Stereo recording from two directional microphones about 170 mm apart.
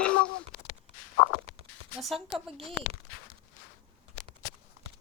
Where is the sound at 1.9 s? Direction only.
Centre (ahead or behind).